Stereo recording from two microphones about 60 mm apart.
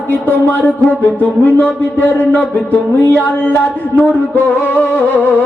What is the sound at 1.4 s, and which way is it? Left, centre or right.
Mantra, left.